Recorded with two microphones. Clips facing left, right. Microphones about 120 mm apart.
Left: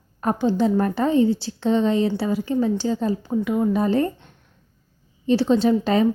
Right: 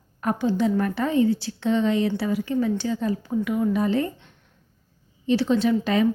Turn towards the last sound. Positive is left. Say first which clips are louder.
# left 3 dB
turn(degrees=35)  # may be behind; listen again after turning